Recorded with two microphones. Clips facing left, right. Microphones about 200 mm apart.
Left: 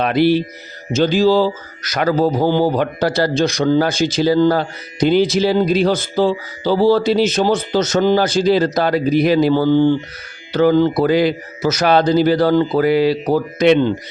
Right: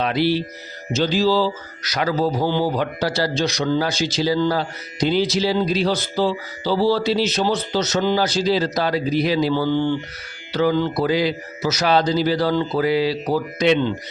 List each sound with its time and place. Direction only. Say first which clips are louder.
0.0 s a man's voice: left 5 dB; 55° left (ahead or behind)